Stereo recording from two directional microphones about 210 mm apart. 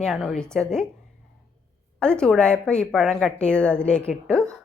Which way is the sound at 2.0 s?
5° left (ahead or behind).